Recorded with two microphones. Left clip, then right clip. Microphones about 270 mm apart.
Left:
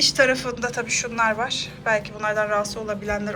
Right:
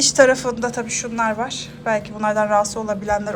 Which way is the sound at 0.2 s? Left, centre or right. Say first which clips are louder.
Right 5 dB; centre.